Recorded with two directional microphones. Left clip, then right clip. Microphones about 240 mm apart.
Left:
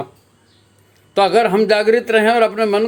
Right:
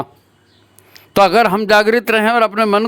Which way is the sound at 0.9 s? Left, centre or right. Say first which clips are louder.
Right 3 dB; right.